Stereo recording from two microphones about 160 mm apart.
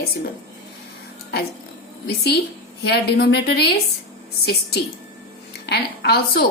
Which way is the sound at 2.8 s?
90° left.